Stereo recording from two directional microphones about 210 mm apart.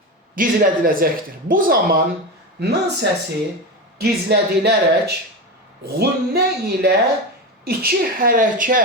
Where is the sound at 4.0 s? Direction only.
50° right (ahead or behind).